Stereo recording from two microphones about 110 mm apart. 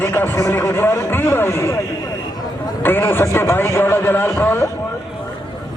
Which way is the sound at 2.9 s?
20° left (ahead or behind).